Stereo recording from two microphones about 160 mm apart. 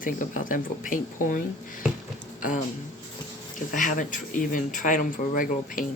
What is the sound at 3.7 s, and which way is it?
Speech, 55° left (ahead or behind).